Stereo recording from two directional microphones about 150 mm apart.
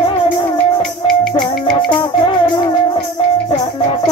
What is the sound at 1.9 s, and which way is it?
Music, 30° left (ahead or behind).